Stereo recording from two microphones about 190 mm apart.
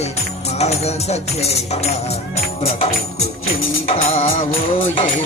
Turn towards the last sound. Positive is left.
turn(degrees=30)  # may be behind; listen again after turning